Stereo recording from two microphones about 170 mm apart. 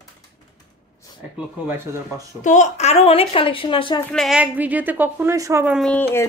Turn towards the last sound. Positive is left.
turn(degrees=0)  # may be behind; listen again after turning